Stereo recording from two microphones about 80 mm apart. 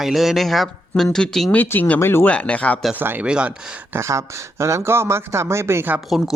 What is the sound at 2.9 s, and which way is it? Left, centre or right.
Speech, right.